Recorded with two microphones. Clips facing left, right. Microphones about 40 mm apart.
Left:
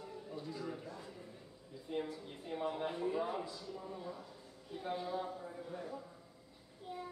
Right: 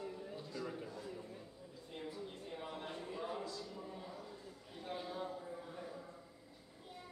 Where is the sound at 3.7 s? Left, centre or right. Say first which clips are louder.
Left 3 dB; centre.